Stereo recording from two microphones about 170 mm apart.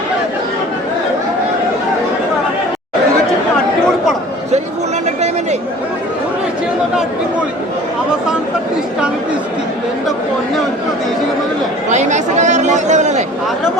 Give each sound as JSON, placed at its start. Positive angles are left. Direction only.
{"t": 11.9, "sound": "chatter", "side_deg": -45}